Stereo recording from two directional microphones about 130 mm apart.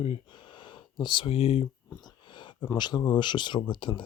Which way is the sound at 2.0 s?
35° left (ahead or behind).